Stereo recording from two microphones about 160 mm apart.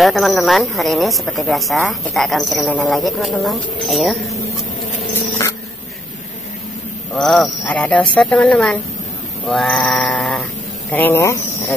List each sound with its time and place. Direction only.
0.0 s speech: centre (ahead or behind)
7.2 s speech: centre (ahead or behind); by 11.7 s 20° left (ahead or behind)